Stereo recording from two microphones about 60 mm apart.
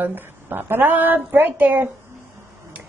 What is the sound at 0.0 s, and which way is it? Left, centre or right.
A woman's voice, right.